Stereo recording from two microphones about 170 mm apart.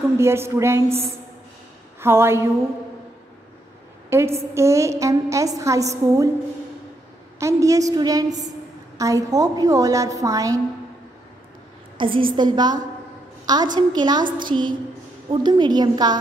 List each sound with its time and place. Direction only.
0.2 s a woman's voice: 15° right (ahead or behind)
2.0 s a woman's voice: 15° right (ahead or behind)
4.1 s a woman's voice: 15° right (ahead or behind)
7.3 s a woman's voice: 20° right (ahead or behind)
12.0 s a woman's voice: 30° right (ahead or behind)
13.7 s a woman's voice: 25° right (ahead or behind)